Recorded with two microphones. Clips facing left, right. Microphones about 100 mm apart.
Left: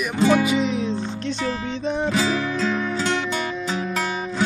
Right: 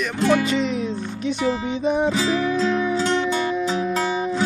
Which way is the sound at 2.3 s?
5° right (ahead or behind).